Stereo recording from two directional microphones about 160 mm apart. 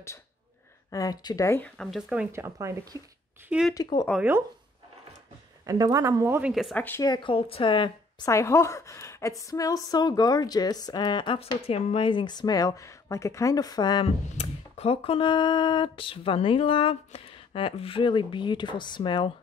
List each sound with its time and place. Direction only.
0.8 s a woman's voice: 20° left (ahead or behind)
1.6 s speech: centre (ahead or behind)
2.3 s speech: 15° right (ahead or behind)
3.4 s speech: 5° right (ahead or behind)
3.7 s a woman's voice: 25° left (ahead or behind)
4.1 s speech: 10° right (ahead or behind)
5.7 s speech: 20° right (ahead or behind)
6.5 s speech: centre (ahead or behind)
7.0 s speech: 30° left (ahead or behind)
8.3 s a woman's voice: 20° left (ahead or behind)
14.0 s speech: 40° left (ahead or behind)